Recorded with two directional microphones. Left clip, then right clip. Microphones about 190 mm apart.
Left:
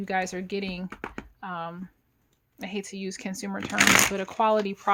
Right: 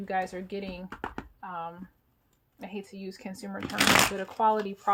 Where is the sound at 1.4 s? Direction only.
50° left (ahead or behind).